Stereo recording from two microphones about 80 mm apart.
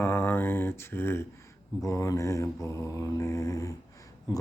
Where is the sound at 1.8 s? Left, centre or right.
Left.